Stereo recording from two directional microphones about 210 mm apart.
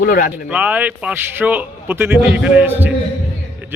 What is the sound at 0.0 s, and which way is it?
Speech, 45° left (ahead or behind).